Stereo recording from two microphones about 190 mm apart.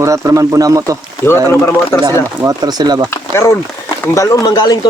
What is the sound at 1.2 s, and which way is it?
Speech, 10° left (ahead or behind).